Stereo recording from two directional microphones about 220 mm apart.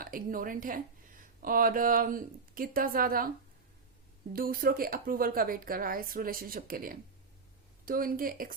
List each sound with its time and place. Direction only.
0.0 s a woman's voice: 40° right (ahead or behind)
4.3 s a woman's voice: 40° right (ahead or behind)